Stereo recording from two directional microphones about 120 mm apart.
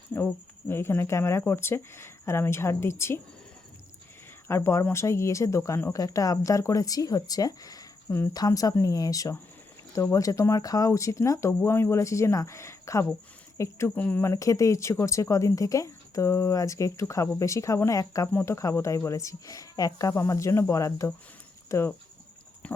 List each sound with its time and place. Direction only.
0.7 s speech: 20° left (ahead or behind)
4.4 s speech: 20° left (ahead or behind)
14.3 s speech: 30° left (ahead or behind)